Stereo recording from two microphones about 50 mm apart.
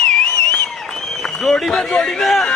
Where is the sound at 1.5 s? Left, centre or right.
Centre.